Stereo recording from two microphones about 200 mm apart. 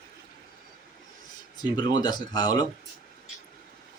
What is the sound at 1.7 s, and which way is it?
Speech, 20° left (ahead or behind).